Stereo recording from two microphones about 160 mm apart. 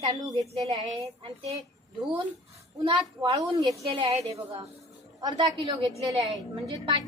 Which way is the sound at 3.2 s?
25° right (ahead or behind).